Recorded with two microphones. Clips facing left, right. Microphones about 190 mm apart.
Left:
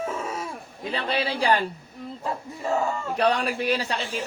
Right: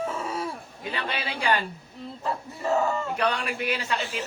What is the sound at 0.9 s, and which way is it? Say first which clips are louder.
Speech: left 5 dB; 35° left (ahead or behind).